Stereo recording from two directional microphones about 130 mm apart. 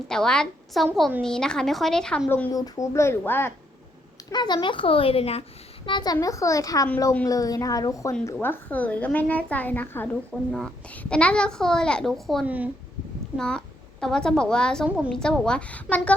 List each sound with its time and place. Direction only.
0.1 s a child's voice: 5° left (ahead or behind)
2.5 s speech: 25° left (ahead or behind)
4.3 s a woman's voice: 35° left (ahead or behind)
6.1 s speech: 25° left (ahead or behind)
8.3 s a woman's voice: 15° left (ahead or behind)
10.3 s a child's voice: 5° right (ahead or behind)
10.9 s a child's voice: 10° left (ahead or behind)
12.5 s speech: 10° right (ahead or behind)
13.3 s a woman's voice: 5° left (ahead or behind)